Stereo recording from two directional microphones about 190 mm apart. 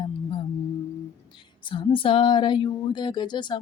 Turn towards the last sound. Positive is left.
turn(degrees=25)  # may be behind; listen again after turning